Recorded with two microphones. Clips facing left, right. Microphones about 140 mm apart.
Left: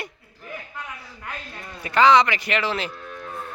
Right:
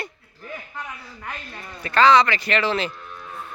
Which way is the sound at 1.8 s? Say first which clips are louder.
Even; 15° left (ahead or behind).